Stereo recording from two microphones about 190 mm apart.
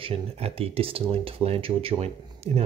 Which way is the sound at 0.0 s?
30° right (ahead or behind).